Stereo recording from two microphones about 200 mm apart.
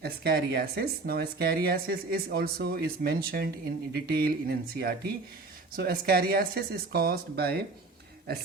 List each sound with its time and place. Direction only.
0.0 s speech: 50° right (ahead or behind)